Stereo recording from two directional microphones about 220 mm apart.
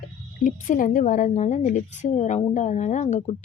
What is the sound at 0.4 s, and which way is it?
A woman's voice, 35° left (ahead or behind).